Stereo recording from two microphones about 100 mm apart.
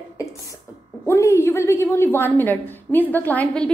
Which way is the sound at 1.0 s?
25° left (ahead or behind).